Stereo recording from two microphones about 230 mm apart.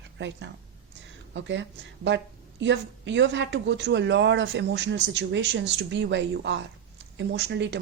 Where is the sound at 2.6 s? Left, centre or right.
Right.